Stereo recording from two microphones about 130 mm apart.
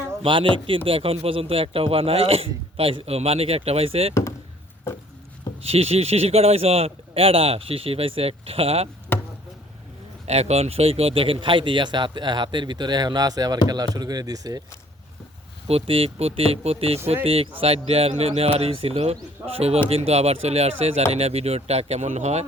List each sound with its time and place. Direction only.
0.2 s a man's voice: 40° right (ahead or behind)
4.1 s speech: 20° left (ahead or behind)
5.6 s a man's voice: 50° right (ahead or behind)
9.1 s chop: 15° left (ahead or behind)
10.2 s speech: 55° right (ahead or behind); by 14.6 s 30° right (ahead or behind)
15.6 s a man's voice: 50° right (ahead or behind)